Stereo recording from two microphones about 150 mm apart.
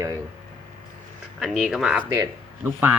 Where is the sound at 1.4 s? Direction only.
Centre (ahead or behind).